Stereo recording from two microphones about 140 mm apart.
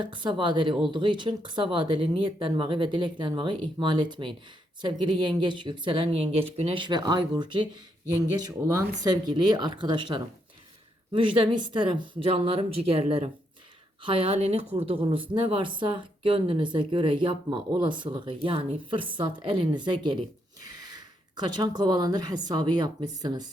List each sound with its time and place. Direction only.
0.0 s speech: 35° right (ahead or behind)
9.0 s speech: 30° right (ahead or behind)